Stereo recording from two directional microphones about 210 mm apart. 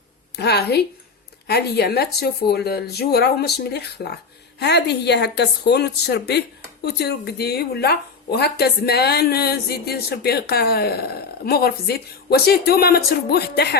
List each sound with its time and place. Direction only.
0.3 s speech: 50° left (ahead or behind)